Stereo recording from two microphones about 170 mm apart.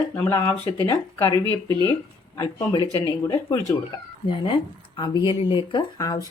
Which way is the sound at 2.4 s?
20° left (ahead or behind).